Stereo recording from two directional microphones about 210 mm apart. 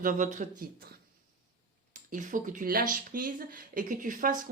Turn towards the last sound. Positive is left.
turn(degrees=-40)  # may be behind; listen again after turning